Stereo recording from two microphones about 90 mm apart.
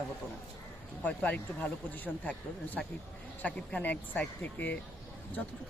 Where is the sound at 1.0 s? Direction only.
15° left (ahead or behind).